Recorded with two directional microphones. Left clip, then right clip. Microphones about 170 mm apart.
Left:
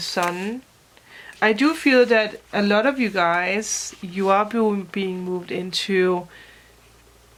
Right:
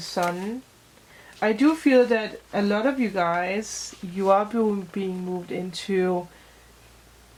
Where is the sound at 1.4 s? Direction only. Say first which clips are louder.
Left 3 dB; 35° left (ahead or behind).